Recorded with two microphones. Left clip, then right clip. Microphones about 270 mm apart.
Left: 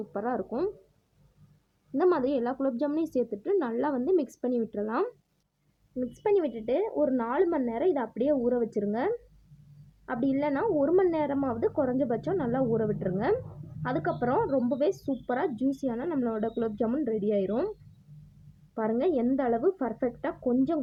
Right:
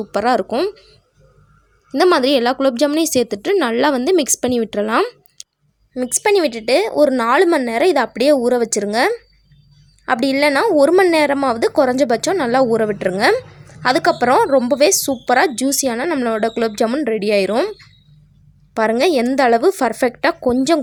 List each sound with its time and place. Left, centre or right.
0.1 s a woman's voice: right
2.0 s a woman's voice: right
11.7 s speech: right
11.9 s a woman's voice: right
18.7 s a woman's voice: right